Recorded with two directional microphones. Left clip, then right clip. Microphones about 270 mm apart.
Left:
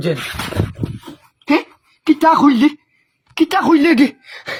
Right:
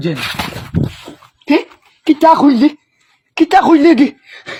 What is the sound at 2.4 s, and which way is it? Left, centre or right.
Speech, left.